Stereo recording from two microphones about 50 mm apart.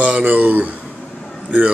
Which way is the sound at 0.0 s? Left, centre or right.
Right.